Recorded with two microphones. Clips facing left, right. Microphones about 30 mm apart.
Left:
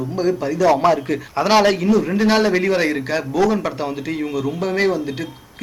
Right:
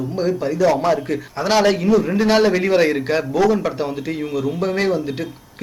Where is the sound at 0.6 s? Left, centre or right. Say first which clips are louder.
Left 2 dB; centre.